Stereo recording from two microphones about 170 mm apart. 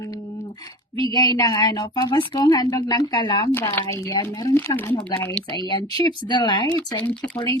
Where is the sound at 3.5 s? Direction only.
15° left (ahead or behind).